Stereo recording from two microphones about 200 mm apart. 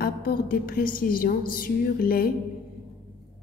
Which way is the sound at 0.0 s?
45° left (ahead or behind).